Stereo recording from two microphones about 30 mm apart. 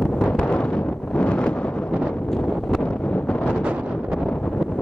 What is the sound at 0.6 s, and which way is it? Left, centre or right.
Wind noise, left.